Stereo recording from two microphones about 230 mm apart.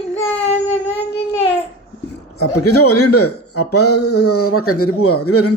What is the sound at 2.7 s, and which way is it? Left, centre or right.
Speech, left.